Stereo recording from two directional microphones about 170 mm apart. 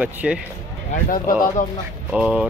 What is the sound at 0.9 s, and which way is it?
Speech, 55° left (ahead or behind).